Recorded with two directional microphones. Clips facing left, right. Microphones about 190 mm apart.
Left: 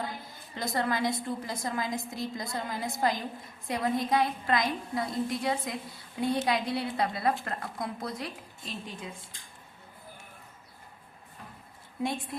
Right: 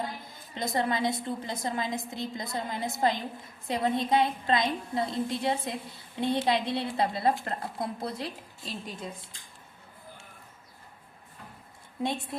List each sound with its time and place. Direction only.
0.5 s a woman's voice: 20° right (ahead or behind)